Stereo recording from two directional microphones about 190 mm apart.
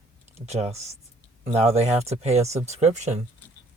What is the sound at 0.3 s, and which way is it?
Speech, 35° right (ahead or behind).